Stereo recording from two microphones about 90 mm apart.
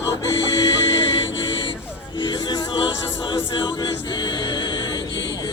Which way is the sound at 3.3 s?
55° left (ahead or behind).